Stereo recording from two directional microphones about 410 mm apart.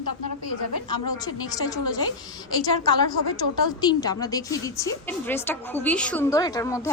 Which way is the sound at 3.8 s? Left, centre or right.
Centre.